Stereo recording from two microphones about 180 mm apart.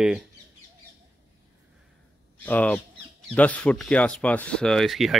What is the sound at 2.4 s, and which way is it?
Speech, 10° left (ahead or behind).